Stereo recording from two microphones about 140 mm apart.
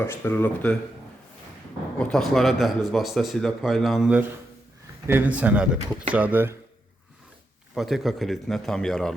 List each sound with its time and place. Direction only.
0.0 s speech: 15° left (ahead or behind)
2.0 s speech: 5° left (ahead or behind)
5.0 s a man's voice: 15° right (ahead or behind)
7.8 s speech: centre (ahead or behind)